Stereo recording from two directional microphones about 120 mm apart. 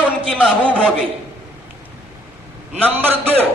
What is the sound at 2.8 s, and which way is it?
Speech, 15° right (ahead or behind).